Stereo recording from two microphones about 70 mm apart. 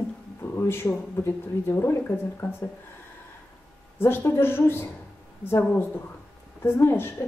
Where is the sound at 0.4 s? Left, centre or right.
Left.